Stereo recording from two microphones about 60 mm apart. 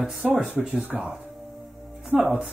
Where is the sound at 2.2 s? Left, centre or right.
Centre.